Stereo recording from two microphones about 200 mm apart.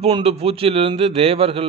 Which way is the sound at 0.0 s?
30° right (ahead or behind).